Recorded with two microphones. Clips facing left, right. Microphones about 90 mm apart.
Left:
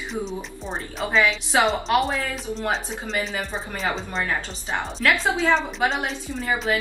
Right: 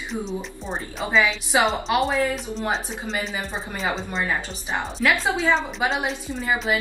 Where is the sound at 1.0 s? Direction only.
10° right (ahead or behind).